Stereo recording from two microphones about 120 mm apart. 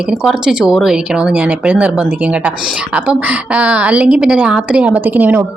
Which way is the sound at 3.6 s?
10° right (ahead or behind).